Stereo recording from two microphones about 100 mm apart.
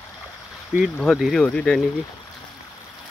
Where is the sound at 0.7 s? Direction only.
15° right (ahead or behind).